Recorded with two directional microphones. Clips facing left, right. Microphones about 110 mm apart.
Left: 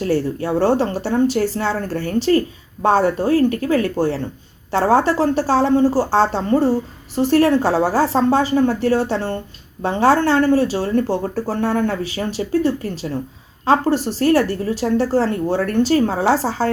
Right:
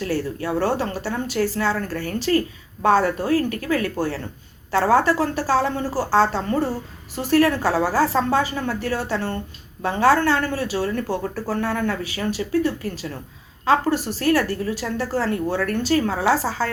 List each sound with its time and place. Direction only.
0.0 s speech: 30° left (ahead or behind)